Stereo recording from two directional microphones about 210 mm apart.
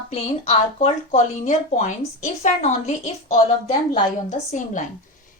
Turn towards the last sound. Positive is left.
turn(degrees=35)  # may be behind; listen again after turning